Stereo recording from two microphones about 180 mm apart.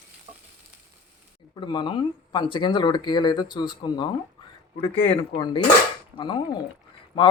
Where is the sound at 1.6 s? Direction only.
25° left (ahead or behind).